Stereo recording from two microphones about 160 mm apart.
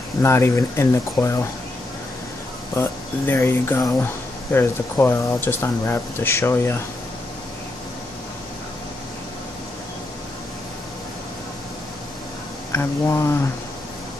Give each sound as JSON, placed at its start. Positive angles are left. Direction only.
{"t": 0.2, "sound": "speech", "side_deg": 15}
{"t": 2.7, "sound": "speech", "side_deg": 15}
{"t": 12.7, "sound": "speech", "side_deg": 15}